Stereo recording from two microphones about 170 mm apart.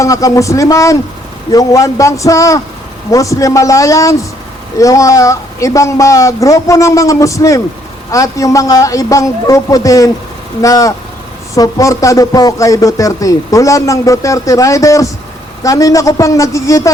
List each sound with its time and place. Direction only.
0.0 s speech: 20° left (ahead or behind)